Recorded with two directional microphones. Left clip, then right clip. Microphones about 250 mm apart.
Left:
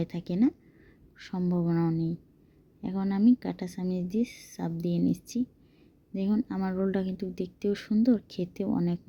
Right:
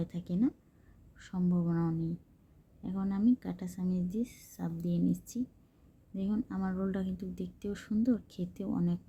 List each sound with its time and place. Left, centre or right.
0.0 s speech: centre